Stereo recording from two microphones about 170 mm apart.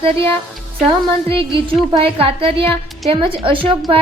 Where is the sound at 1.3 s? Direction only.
30° right (ahead or behind).